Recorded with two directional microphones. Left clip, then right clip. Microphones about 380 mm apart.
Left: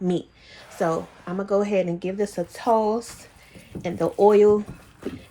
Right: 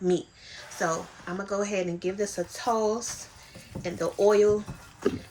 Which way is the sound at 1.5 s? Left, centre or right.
Centre.